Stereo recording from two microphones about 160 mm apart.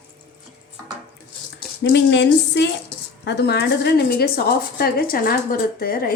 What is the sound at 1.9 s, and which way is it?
Speech, 90° left.